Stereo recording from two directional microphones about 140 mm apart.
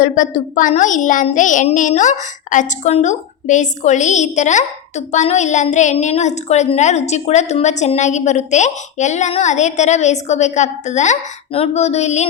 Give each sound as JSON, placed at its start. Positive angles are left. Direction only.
{"t": 0.0, "sound": "a woman's voice", "side_deg": 65}